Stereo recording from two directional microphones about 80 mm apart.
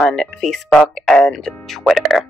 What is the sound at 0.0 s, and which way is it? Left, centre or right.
Speech, centre.